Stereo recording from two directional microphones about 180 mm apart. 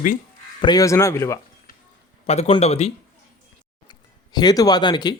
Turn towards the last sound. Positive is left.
turn(degrees=25)  # may be behind; listen again after turning